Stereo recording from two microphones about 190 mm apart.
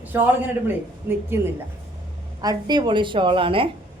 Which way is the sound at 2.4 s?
20° right (ahead or behind).